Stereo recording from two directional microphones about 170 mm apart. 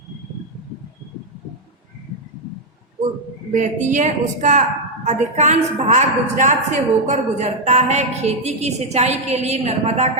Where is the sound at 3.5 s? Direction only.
45° right (ahead or behind).